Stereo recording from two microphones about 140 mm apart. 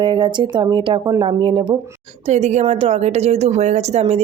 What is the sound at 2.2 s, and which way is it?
Speech, 55° right (ahead or behind).